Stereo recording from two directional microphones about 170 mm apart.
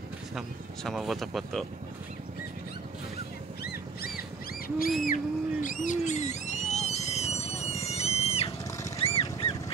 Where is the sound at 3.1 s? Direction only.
65° left (ahead or behind).